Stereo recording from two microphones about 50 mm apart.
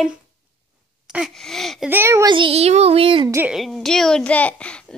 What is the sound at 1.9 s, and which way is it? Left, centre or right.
Speech, right.